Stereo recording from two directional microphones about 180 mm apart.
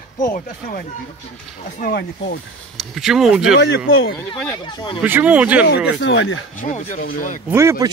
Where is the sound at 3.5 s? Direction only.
70° left (ahead or behind).